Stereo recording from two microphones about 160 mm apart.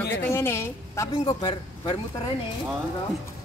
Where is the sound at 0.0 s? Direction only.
15° left (ahead or behind); by 2.0 s 30° left (ahead or behind).